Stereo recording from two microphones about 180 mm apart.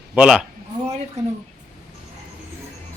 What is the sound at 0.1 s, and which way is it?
Speech, 5° right (ahead or behind).